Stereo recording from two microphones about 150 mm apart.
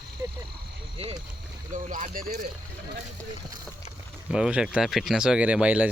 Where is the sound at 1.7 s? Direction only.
60° right (ahead or behind).